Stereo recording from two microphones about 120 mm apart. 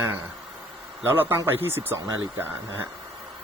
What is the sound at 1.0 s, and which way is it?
Speech, 20° right (ahead or behind).